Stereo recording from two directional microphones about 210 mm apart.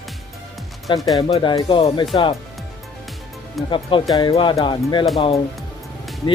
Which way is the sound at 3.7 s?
25° left (ahead or behind).